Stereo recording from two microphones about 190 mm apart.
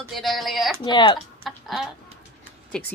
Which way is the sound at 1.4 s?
Centre (ahead or behind).